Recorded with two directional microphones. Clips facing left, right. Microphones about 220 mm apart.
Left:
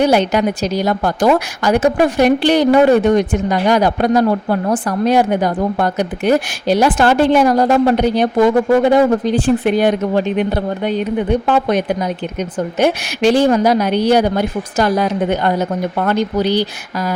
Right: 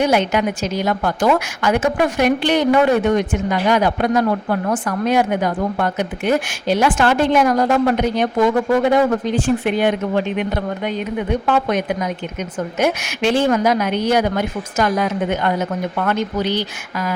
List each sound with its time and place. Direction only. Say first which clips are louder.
0.0 s a woman's voice: left 3 dB; 35° left (ahead or behind)